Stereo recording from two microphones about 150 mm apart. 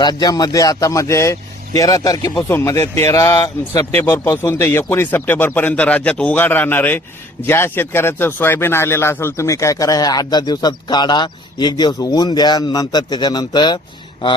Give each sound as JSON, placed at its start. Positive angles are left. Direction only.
{"t": 0.0, "sound": "a man's voice", "side_deg": 25}